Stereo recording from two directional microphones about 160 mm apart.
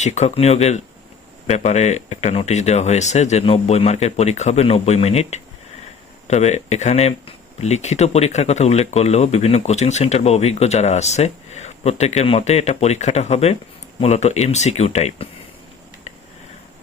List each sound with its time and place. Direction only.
0.0 s speech: 45° left (ahead or behind)